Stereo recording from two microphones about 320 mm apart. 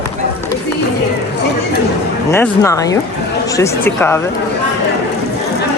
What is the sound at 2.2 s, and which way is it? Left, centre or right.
Speech, centre.